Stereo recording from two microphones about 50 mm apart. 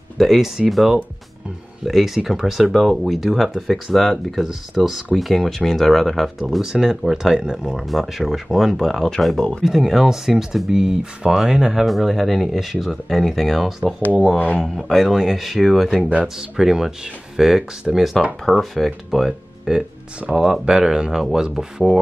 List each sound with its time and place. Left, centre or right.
0.2 s speech: centre
6.6 s speech: centre
7.6 s speech: centre
11.8 s speech: centre
16.3 s speech: centre
19.7 s speech: centre